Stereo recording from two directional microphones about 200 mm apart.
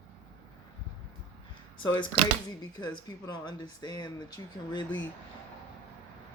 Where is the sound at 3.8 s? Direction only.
20° left (ahead or behind).